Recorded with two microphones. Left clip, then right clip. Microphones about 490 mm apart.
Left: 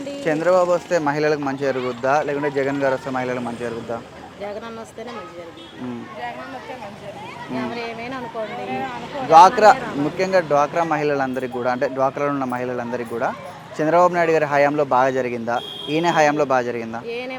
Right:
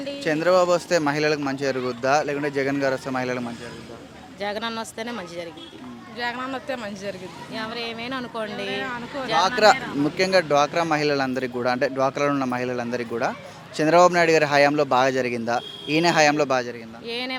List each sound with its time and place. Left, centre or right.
0.3 s speech: centre
9.5 s speech: centre
17.1 s speech: right